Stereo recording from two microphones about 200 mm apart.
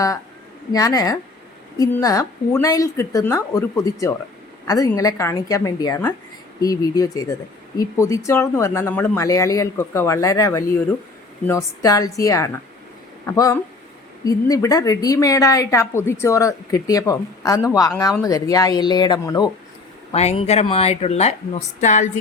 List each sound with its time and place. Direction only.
0.7 s a woman's voice: 20° left (ahead or behind)
20.1 s a woman's voice: 30° left (ahead or behind)